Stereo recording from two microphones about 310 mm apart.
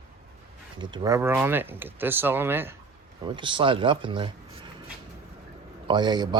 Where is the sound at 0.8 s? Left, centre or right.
Centre.